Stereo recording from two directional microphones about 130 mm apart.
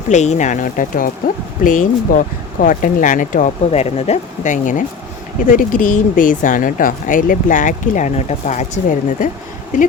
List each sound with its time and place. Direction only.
0.1 s speech: 65° left (ahead or behind); by 4.8 s 80° left
5.5 s speech: 90° left